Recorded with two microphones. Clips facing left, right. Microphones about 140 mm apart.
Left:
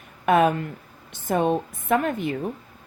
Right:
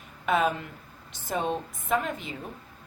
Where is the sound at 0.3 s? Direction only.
55° left (ahead or behind).